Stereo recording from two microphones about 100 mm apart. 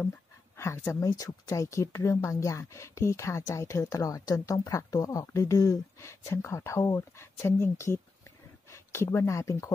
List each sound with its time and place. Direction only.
0.8 s speech: 35° left (ahead or behind)